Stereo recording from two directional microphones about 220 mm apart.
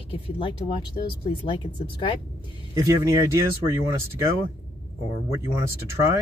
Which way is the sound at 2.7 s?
15° right (ahead or behind).